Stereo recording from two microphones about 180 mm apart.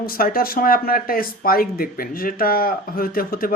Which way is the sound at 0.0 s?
55° left (ahead or behind).